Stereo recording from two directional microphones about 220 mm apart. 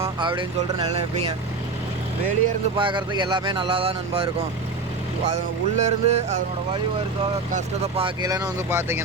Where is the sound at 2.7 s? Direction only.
20° right (ahead or behind).